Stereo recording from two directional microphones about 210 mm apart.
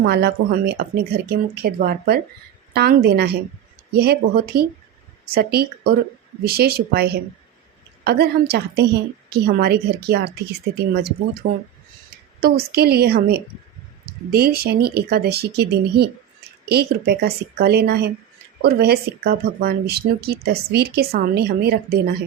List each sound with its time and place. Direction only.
0.0 s speech: 50° right (ahead or behind)
11.4 s speech: 50° right (ahead or behind)